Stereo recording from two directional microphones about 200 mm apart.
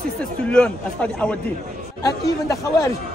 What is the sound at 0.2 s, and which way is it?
A man's voice, 5° left (ahead or behind).